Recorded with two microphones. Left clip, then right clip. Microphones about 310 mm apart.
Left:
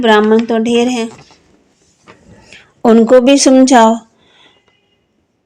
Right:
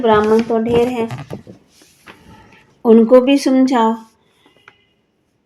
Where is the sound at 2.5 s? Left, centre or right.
Left.